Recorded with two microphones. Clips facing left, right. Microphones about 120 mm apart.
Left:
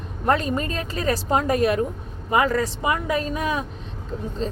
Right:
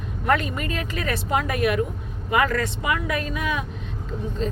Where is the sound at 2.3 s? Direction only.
20° left (ahead or behind).